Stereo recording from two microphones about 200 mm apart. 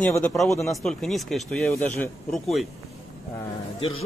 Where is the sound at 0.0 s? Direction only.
5° left (ahead or behind).